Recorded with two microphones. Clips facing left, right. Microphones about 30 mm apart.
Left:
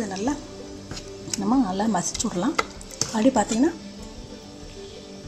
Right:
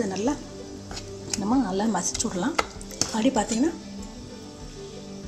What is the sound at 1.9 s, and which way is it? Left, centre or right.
A woman's voice, centre.